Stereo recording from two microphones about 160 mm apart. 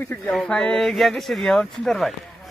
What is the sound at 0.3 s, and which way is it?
Speech, 5° left (ahead or behind).